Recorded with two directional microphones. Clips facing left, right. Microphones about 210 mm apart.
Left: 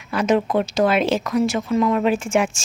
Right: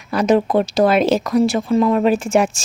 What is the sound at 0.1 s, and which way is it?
Speech, 35° right (ahead or behind).